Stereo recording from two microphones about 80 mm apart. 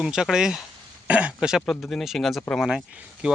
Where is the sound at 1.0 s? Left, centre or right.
Centre.